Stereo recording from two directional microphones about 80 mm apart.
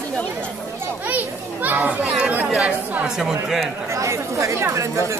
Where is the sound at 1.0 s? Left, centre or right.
Right.